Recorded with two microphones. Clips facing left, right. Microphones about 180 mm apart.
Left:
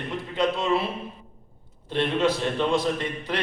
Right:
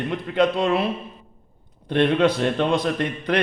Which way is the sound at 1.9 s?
60° right (ahead or behind).